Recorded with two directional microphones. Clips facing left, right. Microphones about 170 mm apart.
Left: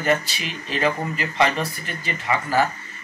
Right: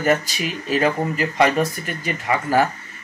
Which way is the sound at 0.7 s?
5° right (ahead or behind).